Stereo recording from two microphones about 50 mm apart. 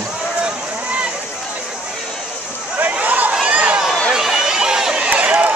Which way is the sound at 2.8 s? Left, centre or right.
Right.